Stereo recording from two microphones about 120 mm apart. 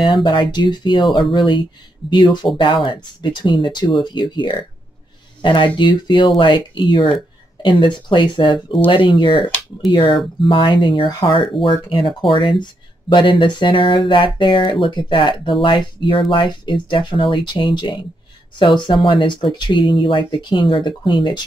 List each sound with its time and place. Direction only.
0.0 s speech: 40° left (ahead or behind)